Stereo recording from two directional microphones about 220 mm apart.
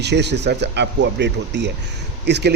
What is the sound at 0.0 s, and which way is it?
Speech, 50° right (ahead or behind).